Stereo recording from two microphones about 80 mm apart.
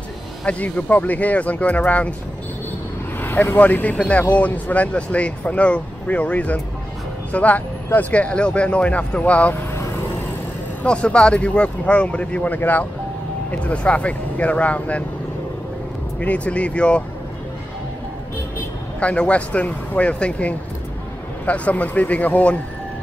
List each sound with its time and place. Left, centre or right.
0.5 s speech: centre
3.2 s speech: left
10.8 s speech: centre
16.2 s speech: centre
18.9 s speech: centre